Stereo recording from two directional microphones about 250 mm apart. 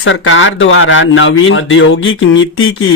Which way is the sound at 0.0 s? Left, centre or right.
Left.